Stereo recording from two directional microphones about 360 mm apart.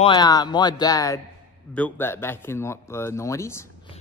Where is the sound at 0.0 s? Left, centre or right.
Centre.